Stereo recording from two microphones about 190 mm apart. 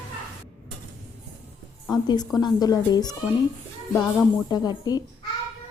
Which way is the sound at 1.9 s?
20° left (ahead or behind).